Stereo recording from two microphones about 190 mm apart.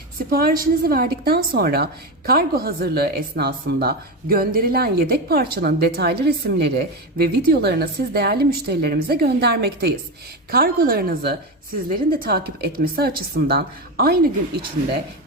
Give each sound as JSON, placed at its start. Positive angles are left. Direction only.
{"t": 0.3, "sound": "a woman's voice", "side_deg": -50}